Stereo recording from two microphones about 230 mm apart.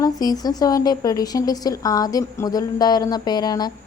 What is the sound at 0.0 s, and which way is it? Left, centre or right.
A woman's voice, centre.